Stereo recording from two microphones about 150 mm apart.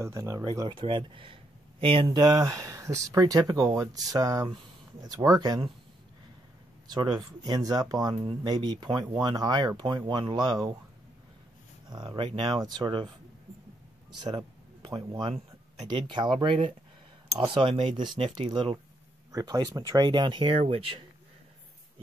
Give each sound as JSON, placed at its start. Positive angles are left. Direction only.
{"t": 0.0, "sound": "speech", "side_deg": -20}
{"t": 2.0, "sound": "speech", "side_deg": -25}
{"t": 6.9, "sound": "speech", "side_deg": -25}
{"t": 11.9, "sound": "speech", "side_deg": -30}
{"t": 14.2, "sound": "speech", "side_deg": -30}